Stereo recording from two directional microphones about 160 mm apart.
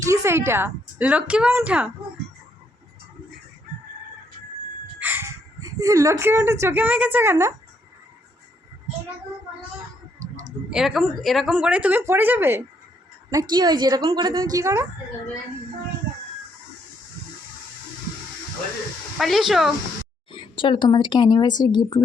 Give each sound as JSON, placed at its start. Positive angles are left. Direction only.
{"t": 0.1, "sound": "speech", "side_deg": -15}
{"t": 4.9, "sound": "speech", "side_deg": -10}
{"t": 10.2, "sound": "a sound", "side_deg": -20}
{"t": 10.7, "sound": "speech", "side_deg": 0}
{"t": 13.3, "sound": "a woman's voice", "side_deg": -25}
{"t": 19.2, "sound": "speech", "side_deg": 0}
{"t": 20.3, "sound": "speech", "side_deg": 30}